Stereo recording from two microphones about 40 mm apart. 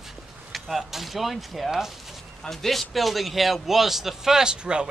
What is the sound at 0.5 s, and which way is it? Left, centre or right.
A man's voice, centre.